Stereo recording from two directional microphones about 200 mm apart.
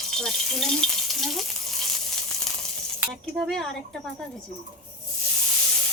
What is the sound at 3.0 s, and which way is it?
Speech, centre (ahead or behind).